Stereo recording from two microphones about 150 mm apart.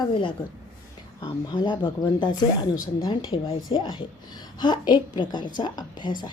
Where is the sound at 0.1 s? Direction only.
35° left (ahead or behind).